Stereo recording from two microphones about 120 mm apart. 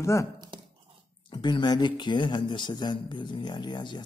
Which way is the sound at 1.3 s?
40° left (ahead or behind).